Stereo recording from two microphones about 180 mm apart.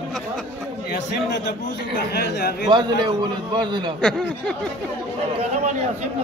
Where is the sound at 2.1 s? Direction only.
65° left (ahead or behind).